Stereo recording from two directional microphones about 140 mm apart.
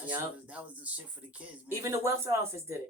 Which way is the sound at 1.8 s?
20° right (ahead or behind).